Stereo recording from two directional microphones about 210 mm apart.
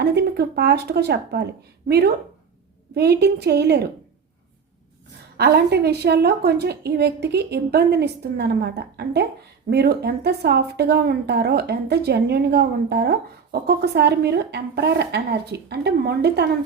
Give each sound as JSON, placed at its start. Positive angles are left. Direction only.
{"t": 0.0, "sound": "a woman's voice", "side_deg": -55}
{"t": 5.4, "sound": "a woman's voice", "side_deg": -50}